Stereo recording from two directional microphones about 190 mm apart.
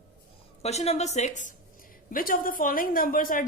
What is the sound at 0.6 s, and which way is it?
A woman's voice, 35° left (ahead or behind).